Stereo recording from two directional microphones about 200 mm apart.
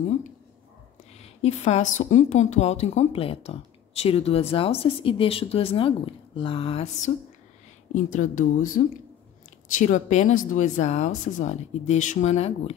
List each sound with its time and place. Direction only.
1.1 s a woman's voice: 30° left (ahead or behind)
9.8 s speech: 40° left (ahead or behind)